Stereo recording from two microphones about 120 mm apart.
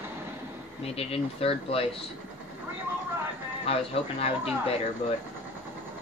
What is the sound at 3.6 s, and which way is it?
Speech, 55° left (ahead or behind).